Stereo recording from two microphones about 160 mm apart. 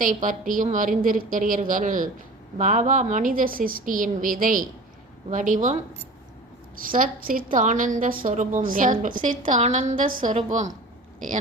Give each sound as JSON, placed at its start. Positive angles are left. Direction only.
{"t": 0.0, "sound": "a woman's voice", "side_deg": -55}
{"t": 6.8, "sound": "a woman's voice", "side_deg": -60}